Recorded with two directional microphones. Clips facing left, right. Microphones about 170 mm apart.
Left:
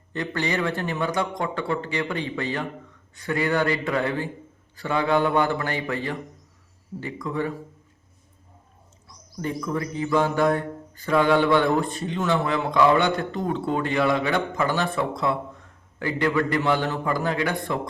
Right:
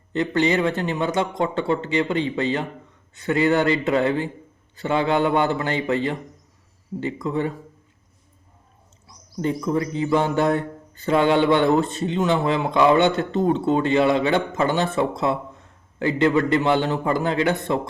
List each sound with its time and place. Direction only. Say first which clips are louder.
0.1 s mantra: right 6 dB; 20° right (ahead or behind)
9.0 s mantra: right 5 dB; 20° right (ahead or behind)